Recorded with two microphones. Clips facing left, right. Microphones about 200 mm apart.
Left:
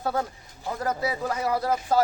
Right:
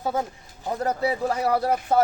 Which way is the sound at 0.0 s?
20° right (ahead or behind).